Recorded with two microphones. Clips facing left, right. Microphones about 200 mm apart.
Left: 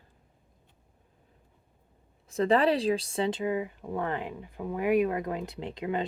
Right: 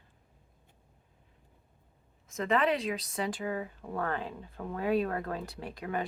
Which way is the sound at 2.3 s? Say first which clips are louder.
Left 5 dB; 35° left (ahead or behind).